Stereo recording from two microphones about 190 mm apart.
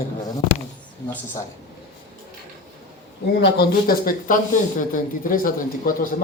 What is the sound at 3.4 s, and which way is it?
A man's voice, 50° left (ahead or behind).